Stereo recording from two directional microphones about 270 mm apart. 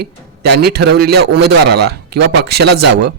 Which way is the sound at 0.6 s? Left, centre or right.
Right.